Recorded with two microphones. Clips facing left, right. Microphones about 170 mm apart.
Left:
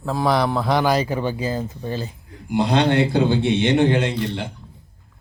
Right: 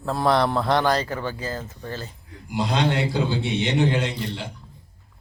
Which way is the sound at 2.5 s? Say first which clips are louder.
Left 5 dB; 60° left (ahead or behind).